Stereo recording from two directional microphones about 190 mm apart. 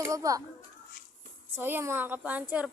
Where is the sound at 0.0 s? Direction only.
15° right (ahead or behind).